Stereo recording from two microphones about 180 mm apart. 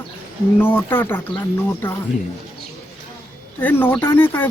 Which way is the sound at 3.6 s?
10° left (ahead or behind).